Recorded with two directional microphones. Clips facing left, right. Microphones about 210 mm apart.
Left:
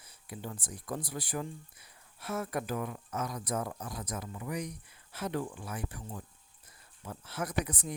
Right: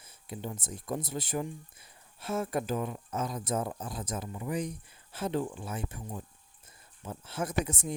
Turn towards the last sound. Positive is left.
turn(degrees=-25)  # may be behind; listen again after turning